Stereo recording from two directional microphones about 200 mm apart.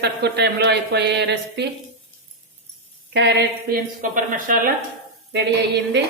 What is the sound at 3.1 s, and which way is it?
Speech, 60° right (ahead or behind).